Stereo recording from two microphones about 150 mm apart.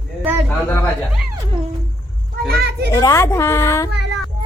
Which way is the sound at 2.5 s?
90° right.